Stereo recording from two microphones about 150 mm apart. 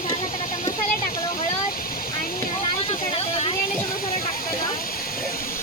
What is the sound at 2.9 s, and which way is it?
Vehicle, 40° left (ahead or behind).